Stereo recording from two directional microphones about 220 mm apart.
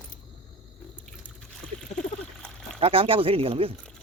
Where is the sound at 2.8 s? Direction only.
25° right (ahead or behind).